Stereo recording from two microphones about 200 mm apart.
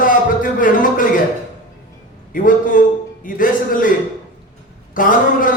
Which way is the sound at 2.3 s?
40° left (ahead or behind).